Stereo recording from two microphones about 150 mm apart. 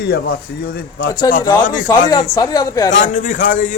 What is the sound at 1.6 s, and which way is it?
Speech, 60° left (ahead or behind).